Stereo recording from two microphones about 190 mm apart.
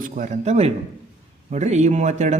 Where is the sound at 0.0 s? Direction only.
40° right (ahead or behind).